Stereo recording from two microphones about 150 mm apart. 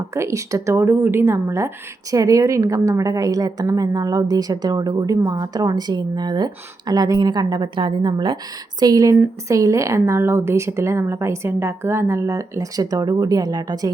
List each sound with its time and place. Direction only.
0.1 s a woman's voice: 20° right (ahead or behind)